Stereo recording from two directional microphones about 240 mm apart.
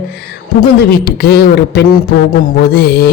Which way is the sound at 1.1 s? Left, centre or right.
Left.